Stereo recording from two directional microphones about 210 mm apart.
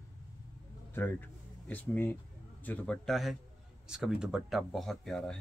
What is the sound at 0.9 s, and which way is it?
Speech, 10° left (ahead or behind).